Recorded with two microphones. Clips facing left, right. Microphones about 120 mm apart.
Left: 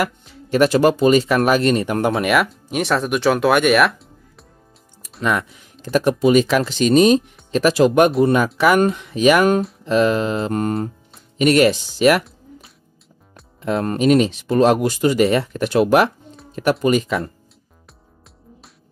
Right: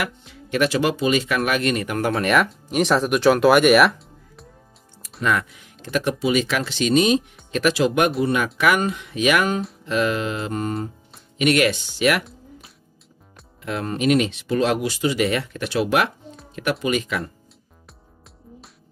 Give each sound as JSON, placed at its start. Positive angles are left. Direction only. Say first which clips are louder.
{"t": 0.0, "sound": "speech", "louder": "left 6 dB", "side_deg": 35}
{"t": 2.2, "sound": "speech", "louder": "left 2 dB", "side_deg": 5}
{"t": 5.2, "sound": "speech", "louder": "left 2 dB", "side_deg": 30}
{"t": 10.5, "sound": "music", "louder": "left 5 dB", "side_deg": 55}
{"t": 11.3, "sound": "speech", "louder": "left 5 dB", "side_deg": 35}
{"t": 12.3, "sound": "music", "louder": "left 1 dB", "side_deg": 0}
{"t": 13.6, "sound": "music", "louder": "left 7 dB", "side_deg": 35}
{"t": 13.9, "sound": "speech", "louder": "left 3 dB", "side_deg": 35}